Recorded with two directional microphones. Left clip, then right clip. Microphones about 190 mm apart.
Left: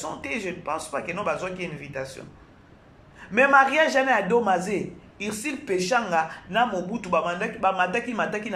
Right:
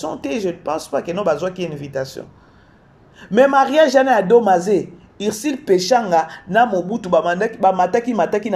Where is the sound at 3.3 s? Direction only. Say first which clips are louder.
Right 5 dB; 30° right (ahead or behind).